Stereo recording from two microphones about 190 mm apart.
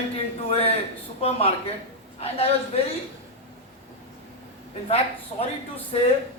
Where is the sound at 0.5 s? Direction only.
30° left (ahead or behind).